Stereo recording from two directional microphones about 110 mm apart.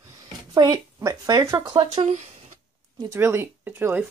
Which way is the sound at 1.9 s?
90° right.